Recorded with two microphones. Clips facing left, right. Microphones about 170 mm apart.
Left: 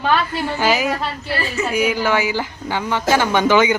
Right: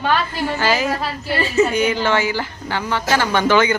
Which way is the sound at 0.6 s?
15° left (ahead or behind).